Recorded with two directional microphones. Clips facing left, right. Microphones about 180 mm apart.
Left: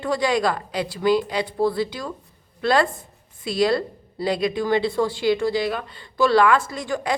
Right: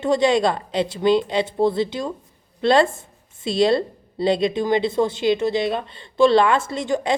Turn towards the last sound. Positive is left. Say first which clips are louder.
# right 4 dB
turn(degrees=-25)  # may be behind; listen again after turning